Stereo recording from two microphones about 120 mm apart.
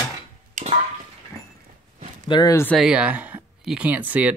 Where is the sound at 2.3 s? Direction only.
35° left (ahead or behind).